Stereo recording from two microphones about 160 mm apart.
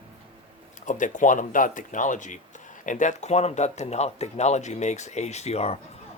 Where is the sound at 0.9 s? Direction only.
55° left (ahead or behind).